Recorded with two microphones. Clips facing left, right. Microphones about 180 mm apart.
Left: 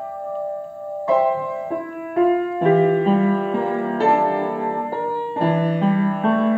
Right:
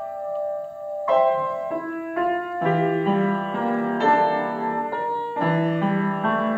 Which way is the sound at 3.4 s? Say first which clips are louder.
Left 3 dB; 20° left (ahead or behind).